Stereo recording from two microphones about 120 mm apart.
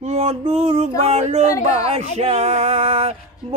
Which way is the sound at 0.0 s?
65° right (ahead or behind).